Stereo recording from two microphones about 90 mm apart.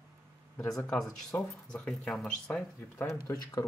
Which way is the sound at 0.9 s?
5° left (ahead or behind).